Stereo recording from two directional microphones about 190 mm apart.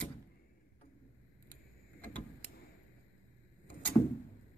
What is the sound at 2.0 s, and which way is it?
Door, 10° left (ahead or behind).